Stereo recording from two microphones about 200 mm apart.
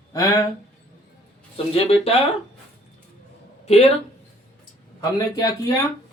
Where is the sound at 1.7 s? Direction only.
30° left (ahead or behind).